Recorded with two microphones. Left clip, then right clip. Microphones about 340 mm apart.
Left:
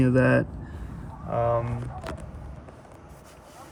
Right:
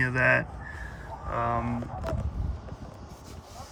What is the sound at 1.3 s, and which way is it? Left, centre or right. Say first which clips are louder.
Speech: left 4 dB; centre.